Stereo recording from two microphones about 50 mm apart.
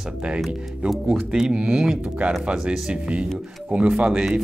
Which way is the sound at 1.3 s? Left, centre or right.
Centre.